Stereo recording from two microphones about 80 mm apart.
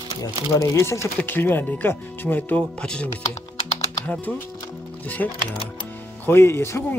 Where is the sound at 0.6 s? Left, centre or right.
Left.